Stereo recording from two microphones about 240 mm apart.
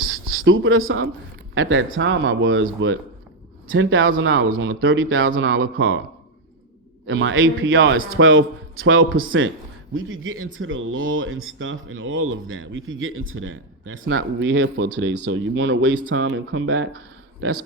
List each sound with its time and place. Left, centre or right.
0.4 s speech: right
7.1 s speech: right